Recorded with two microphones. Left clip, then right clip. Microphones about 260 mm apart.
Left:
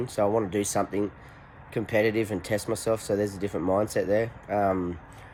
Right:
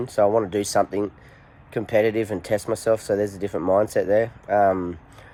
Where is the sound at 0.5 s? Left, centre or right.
Right.